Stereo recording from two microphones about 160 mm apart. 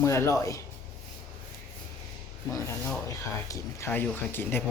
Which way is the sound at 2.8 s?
20° left (ahead or behind).